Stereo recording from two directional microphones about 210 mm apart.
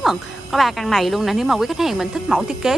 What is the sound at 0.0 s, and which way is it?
A woman's voice, centre (ahead or behind).